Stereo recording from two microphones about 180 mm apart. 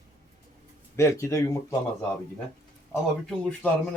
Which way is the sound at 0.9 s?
15° left (ahead or behind).